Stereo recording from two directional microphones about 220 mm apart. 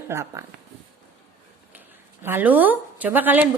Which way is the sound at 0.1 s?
10° right (ahead or behind).